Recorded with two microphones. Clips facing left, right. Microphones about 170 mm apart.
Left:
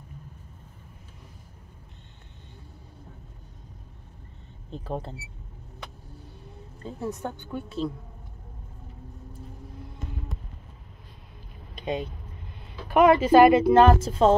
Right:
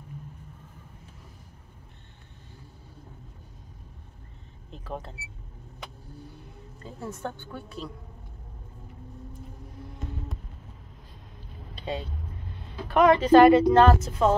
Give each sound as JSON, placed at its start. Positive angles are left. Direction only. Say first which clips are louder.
{"t": 4.6, "sound": "speech", "louder": "left 4 dB", "side_deg": 30}
{"t": 6.8, "sound": "a woman's voice", "louder": "left 3 dB", "side_deg": 20}
{"t": 11.7, "sound": "vehicle", "louder": "left 3 dB", "side_deg": 15}
{"t": 12.9, "sound": "speech", "louder": "even", "side_deg": 10}
{"t": 13.9, "sound": "a woman's voice", "louder": "left 3 dB", "side_deg": 30}